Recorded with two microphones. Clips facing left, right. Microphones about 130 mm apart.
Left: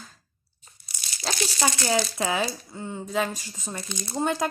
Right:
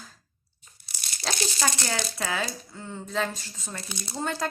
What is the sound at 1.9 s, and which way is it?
Speech, 20° left (ahead or behind).